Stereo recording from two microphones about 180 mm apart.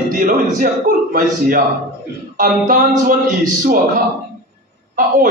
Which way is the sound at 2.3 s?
50° right (ahead or behind).